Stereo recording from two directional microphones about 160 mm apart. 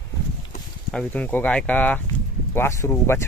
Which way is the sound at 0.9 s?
5° left (ahead or behind).